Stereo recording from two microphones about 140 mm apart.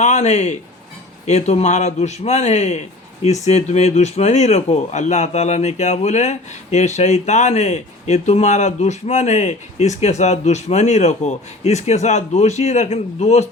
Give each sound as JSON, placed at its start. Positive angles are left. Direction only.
{"t": 0.0, "sound": "a man's voice", "side_deg": 55}